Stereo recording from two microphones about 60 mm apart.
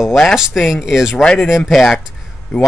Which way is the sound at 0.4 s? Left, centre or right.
Centre.